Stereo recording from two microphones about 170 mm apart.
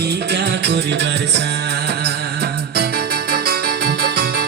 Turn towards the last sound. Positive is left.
turn(degrees=-65)  # may be behind; listen again after turning